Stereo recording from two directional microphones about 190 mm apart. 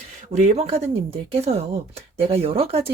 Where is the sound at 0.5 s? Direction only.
30° right (ahead or behind).